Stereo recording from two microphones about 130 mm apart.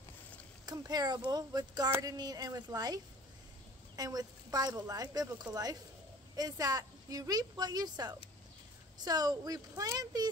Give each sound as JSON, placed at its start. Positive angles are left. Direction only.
{"t": 0.7, "sound": "a woman's voice", "side_deg": -30}